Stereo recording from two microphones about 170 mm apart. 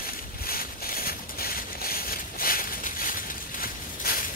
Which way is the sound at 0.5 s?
60° left (ahead or behind).